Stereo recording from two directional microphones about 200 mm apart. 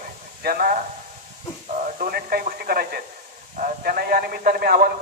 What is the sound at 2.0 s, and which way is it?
Speech, 50° right (ahead or behind).